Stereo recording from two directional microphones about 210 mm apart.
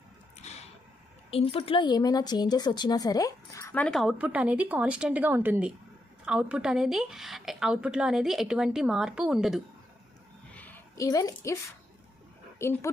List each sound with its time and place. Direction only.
1.3 s a woman's voice: 25° left (ahead or behind); by 9.6 s 5° right (ahead or behind)
10.5 s a sound: 10° left (ahead or behind)
12.5 s speech: 10° left (ahead or behind)